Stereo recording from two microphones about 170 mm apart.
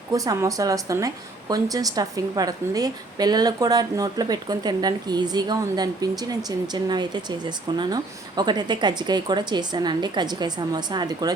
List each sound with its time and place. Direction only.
0.1 s a woman's voice: 20° right (ahead or behind)